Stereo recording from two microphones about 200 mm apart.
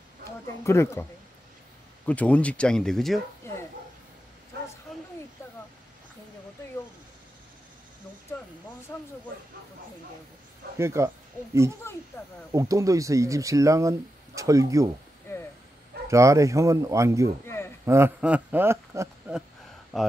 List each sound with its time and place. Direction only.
0.7 s speech: 15° left (ahead or behind)
2.0 s speech: 5° left (ahead or behind)
3.4 s a sound: 15° left (ahead or behind)
8.9 s speech: 10° left (ahead or behind)
10.8 s speech: 15° right (ahead or behind)
11.8 s speech: 15° left (ahead or behind)
12.5 s speech: 15° right (ahead or behind)
16.1 s speech: 15° right (ahead or behind)
17.5 s a sound: 10° left (ahead or behind)
17.8 s speech: 10° right (ahead or behind)